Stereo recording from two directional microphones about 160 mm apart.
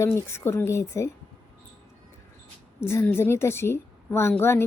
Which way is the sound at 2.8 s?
15° left (ahead or behind).